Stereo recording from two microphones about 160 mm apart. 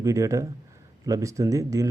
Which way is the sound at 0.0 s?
20° right (ahead or behind).